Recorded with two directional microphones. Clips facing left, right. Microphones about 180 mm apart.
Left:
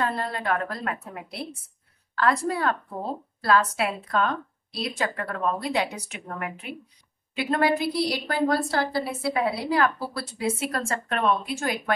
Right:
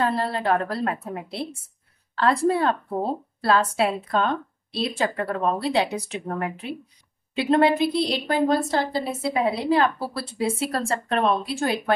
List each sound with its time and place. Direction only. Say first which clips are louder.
0.0 s a woman's voice: right 4 dB; 30° right (ahead or behind)